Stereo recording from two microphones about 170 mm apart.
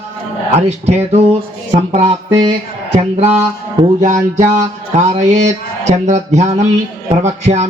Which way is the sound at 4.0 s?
45° right (ahead or behind).